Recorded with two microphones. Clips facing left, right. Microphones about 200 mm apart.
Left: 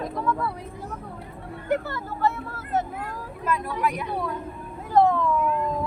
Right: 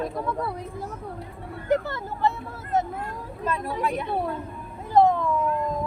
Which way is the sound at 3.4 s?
30° right (ahead or behind).